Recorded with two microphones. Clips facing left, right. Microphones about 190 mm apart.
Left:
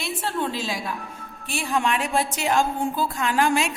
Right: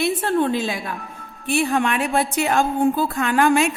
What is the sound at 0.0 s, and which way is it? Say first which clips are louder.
A woman's voice: right 8 dB; 55° right (ahead or behind).